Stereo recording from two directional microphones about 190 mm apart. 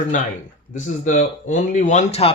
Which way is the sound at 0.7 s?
40° left (ahead or behind).